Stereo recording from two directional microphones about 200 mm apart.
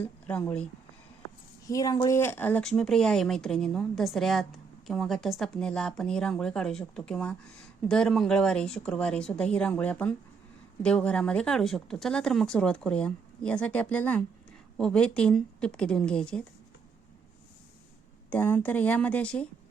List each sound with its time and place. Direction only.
0.0 s speech: 10° left (ahead or behind)
18.3 s speech: 10° left (ahead or behind)